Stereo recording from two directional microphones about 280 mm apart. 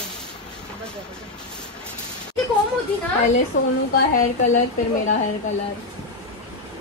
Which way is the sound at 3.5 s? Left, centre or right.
Left.